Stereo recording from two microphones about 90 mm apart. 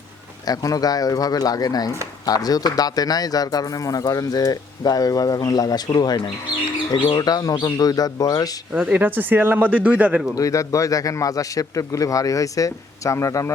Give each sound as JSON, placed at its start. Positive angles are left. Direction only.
{"t": 0.4, "sound": "speech", "side_deg": 45}
{"t": 6.9, "sound": "speech", "side_deg": 65}
{"t": 7.2, "sound": "speech", "side_deg": 45}
{"t": 8.7, "sound": "speech", "side_deg": -15}
{"t": 10.3, "sound": "a man's voice", "side_deg": 40}